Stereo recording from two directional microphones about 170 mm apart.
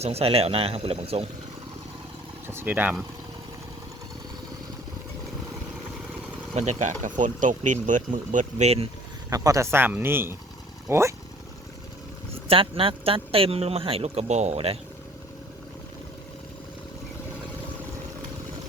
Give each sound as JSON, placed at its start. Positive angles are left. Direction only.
{"t": 0.0, "sound": "speech", "side_deg": -35}
{"t": 2.5, "sound": "speech", "side_deg": -10}
{"t": 6.5, "sound": "speech", "side_deg": -40}
{"t": 9.3, "sound": "speech", "side_deg": -20}
{"t": 12.5, "sound": "speech", "side_deg": -30}